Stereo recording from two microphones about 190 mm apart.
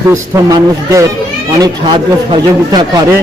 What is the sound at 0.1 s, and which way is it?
A man's voice, 15° right (ahead or behind).